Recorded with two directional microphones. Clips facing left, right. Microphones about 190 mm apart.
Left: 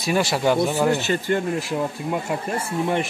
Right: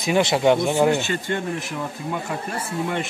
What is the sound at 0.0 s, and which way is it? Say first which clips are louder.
Speech: right 2 dB; 20° right (ahead or behind).